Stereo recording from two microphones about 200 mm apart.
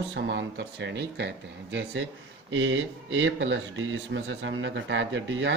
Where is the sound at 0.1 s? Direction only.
60° right (ahead or behind).